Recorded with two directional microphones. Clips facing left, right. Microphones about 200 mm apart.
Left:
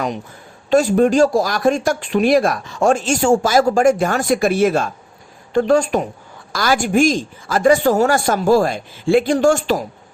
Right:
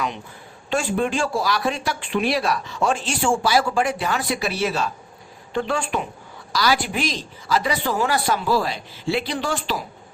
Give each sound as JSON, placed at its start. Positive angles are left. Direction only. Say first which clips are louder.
{"t": 0.7, "sound": "speech", "louder": "left 9 dB", "side_deg": 40}